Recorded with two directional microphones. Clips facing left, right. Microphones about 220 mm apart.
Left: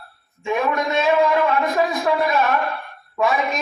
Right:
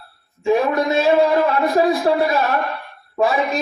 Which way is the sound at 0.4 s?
35° right (ahead or behind).